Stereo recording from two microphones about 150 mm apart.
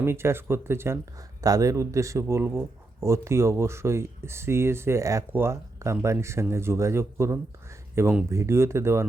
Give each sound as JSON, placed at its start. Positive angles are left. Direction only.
{"t": 0.0, "sound": "speech", "side_deg": -15}